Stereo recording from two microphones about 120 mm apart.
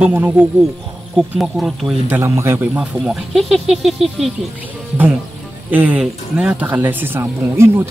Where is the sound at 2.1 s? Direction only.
20° right (ahead or behind).